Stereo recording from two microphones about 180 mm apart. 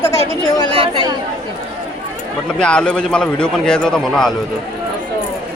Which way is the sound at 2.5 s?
5° left (ahead or behind).